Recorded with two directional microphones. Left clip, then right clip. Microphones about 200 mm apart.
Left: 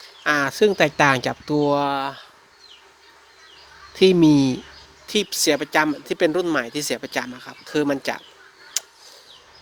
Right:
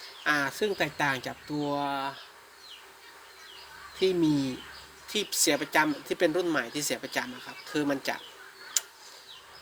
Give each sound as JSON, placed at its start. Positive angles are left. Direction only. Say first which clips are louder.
{"t": 0.3, "sound": "speech", "louder": "left 9 dB", "side_deg": 45}
{"t": 4.0, "sound": "speech", "louder": "left 11 dB", "side_deg": 45}
{"t": 8.8, "sound": "tick-tock", "louder": "left 4 dB", "side_deg": 45}